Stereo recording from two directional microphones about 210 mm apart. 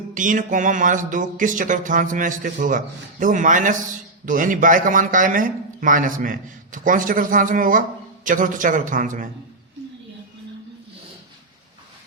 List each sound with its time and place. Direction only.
0.1 s a man's voice: 40° right (ahead or behind)